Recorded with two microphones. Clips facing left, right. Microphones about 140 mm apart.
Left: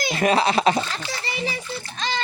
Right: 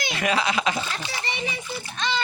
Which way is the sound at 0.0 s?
35° left (ahead or behind).